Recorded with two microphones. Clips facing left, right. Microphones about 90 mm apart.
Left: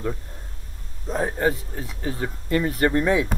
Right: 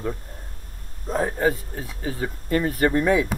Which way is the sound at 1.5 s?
45° right (ahead or behind).